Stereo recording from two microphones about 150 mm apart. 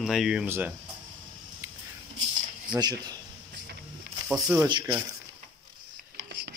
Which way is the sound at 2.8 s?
25° right (ahead or behind).